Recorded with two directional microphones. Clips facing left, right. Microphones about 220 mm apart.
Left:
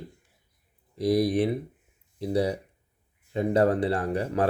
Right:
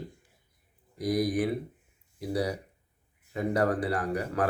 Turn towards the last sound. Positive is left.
turn(degrees=25)  # may be behind; listen again after turning